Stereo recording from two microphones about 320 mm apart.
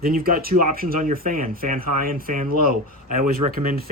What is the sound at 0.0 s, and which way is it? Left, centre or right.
Speech, right.